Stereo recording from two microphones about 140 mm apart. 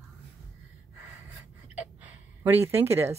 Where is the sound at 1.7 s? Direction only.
15° right (ahead or behind).